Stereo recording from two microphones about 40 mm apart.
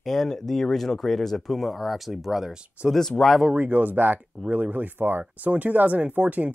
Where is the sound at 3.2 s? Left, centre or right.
Centre.